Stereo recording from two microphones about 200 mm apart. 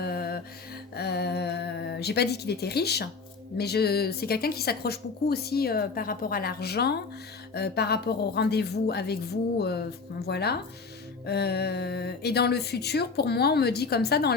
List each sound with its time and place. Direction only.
0.0 s music: 50° left (ahead or behind)
0.9 s a sound: 55° left (ahead or behind)
3.6 s a woman's voice: 55° left (ahead or behind)